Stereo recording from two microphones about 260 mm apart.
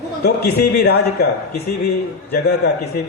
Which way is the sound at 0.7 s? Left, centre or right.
Left.